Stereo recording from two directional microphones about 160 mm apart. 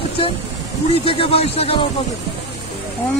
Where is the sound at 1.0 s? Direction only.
40° left (ahead or behind).